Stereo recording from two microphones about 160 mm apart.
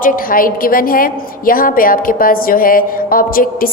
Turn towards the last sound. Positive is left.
turn(degrees=65)  # may be behind; listen again after turning